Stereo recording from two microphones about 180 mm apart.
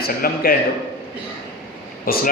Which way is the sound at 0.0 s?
55° left (ahead or behind).